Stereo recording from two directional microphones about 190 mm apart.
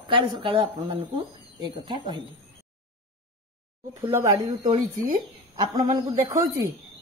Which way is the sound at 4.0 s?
15° right (ahead or behind).